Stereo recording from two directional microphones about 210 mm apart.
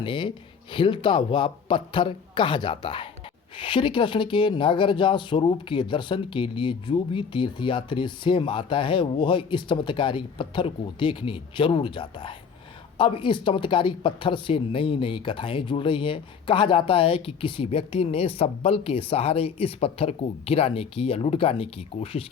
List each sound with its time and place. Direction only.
0.0 s speech: 25° left (ahead or behind)